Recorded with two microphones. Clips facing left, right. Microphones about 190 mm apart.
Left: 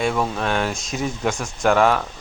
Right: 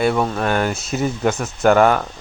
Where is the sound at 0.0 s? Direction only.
5° right (ahead or behind).